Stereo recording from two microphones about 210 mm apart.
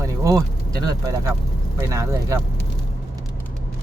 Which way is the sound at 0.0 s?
15° right (ahead or behind).